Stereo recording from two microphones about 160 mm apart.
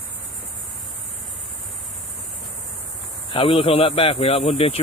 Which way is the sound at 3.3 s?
35° left (ahead or behind).